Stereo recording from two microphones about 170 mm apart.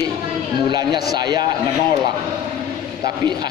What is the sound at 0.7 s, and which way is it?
Speech, 25° right (ahead or behind).